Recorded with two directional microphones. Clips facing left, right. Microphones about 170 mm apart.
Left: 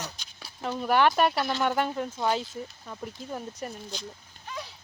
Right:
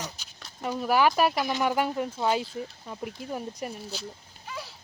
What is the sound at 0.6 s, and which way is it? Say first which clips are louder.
Speech: even; 5° right (ahead or behind).